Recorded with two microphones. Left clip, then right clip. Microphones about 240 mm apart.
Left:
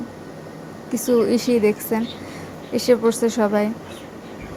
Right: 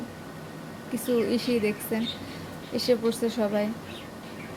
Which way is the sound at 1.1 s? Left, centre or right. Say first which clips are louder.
Left 8 dB; centre.